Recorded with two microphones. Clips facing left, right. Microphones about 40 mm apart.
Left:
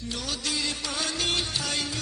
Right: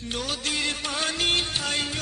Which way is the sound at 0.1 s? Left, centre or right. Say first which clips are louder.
Right 3 dB; right.